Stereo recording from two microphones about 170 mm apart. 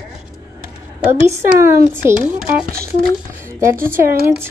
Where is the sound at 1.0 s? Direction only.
15° right (ahead or behind).